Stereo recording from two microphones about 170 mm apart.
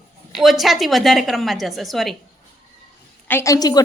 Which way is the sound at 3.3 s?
15° left (ahead or behind).